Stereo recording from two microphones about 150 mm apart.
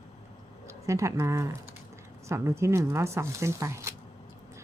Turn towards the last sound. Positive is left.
turn(degrees=-20)  # may be behind; listen again after turning